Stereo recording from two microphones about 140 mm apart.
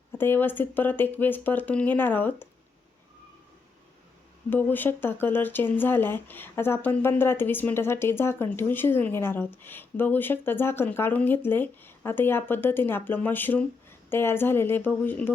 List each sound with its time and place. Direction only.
0.1 s speech: 15° left (ahead or behind)
4.4 s speech: 15° left (ahead or behind)